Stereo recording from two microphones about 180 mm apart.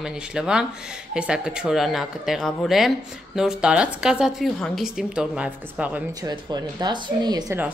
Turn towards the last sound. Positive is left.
turn(degrees=-20)  # may be behind; listen again after turning